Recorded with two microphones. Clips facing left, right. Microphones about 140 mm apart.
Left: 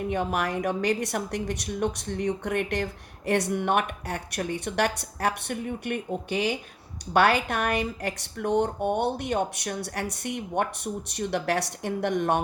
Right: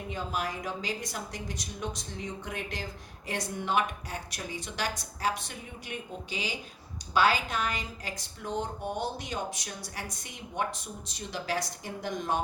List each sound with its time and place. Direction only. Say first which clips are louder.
0.1 s a woman's voice: left 5 dB; 65° left (ahead or behind)